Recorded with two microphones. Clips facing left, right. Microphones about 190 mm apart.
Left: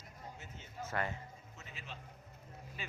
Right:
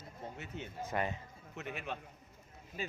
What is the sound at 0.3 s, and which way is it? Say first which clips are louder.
Speech: right 8 dB; 65° right (ahead or behind).